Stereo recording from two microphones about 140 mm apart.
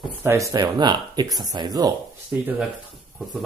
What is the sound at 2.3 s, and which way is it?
Speech, 10° right (ahead or behind).